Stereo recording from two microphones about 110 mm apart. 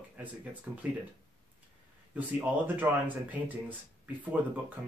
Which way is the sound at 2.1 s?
15° right (ahead or behind).